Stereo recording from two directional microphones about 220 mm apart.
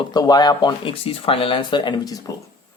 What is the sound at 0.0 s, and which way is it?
Speech, 20° left (ahead or behind).